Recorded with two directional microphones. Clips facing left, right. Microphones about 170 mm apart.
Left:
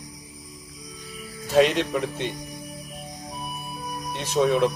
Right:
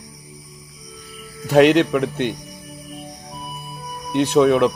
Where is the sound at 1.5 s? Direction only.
65° right (ahead or behind).